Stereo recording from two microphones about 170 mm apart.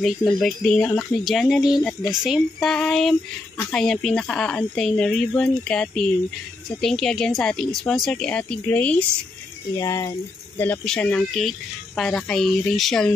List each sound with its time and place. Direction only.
0.0 s speech: centre (ahead or behind)